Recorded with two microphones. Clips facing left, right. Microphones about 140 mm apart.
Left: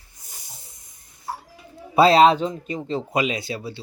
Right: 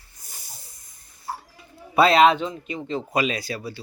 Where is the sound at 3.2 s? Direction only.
20° left (ahead or behind).